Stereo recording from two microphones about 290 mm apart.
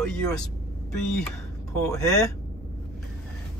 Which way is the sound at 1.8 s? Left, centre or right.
Centre.